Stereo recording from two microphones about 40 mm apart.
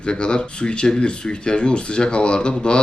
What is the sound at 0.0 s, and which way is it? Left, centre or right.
Speech, left.